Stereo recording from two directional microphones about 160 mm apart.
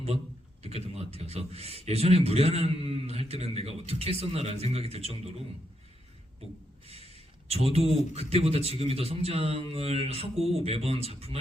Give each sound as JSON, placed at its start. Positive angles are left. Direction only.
{"t": 0.9, "sound": "a man's voice", "side_deg": -40}
{"t": 7.4, "sound": "a man's voice", "side_deg": -40}